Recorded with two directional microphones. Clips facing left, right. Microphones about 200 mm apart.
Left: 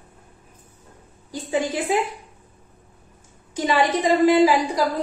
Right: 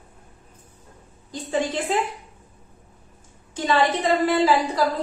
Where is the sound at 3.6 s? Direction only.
15° left (ahead or behind).